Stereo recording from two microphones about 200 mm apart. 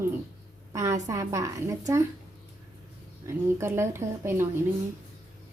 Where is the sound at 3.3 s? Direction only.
15° right (ahead or behind).